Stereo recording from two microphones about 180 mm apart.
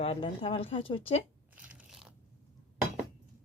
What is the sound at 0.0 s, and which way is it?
A woman's voice, 30° left (ahead or behind).